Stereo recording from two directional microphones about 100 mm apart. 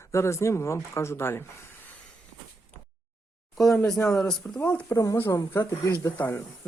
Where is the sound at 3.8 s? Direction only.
5° left (ahead or behind).